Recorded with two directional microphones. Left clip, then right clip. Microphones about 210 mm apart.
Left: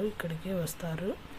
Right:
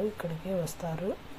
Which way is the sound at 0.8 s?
25° left (ahead or behind).